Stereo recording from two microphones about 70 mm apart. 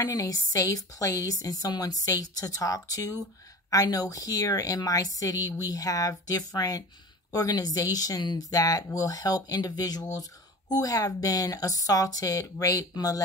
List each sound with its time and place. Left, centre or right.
0.0 s a woman's voice: left